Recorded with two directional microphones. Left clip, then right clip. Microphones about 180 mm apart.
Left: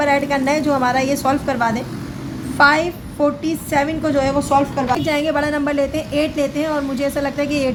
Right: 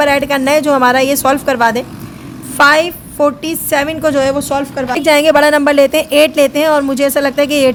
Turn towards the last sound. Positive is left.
turn(degrees=-55)  # may be behind; listen again after turning